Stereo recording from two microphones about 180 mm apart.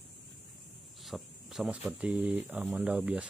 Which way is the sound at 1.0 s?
Centre (ahead or behind).